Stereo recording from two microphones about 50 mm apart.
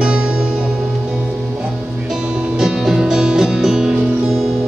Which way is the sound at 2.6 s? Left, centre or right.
Centre.